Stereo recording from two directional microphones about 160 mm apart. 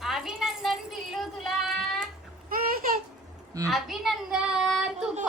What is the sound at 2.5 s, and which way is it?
Babbling, 60° right (ahead or behind).